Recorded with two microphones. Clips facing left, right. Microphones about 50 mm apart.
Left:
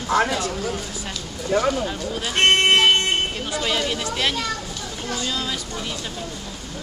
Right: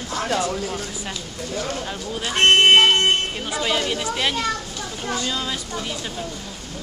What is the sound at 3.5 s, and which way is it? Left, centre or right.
Speech, centre.